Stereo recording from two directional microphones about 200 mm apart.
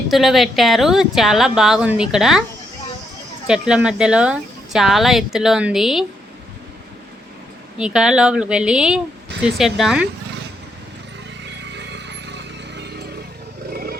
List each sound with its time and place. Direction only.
0.1 s speech: centre (ahead or behind)
3.4 s speech: 5° right (ahead or behind)
7.8 s speech: 5° right (ahead or behind)
11.4 s horse: 60° right (ahead or behind)